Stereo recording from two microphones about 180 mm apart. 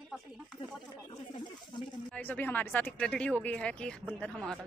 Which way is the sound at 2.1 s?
10° left (ahead or behind).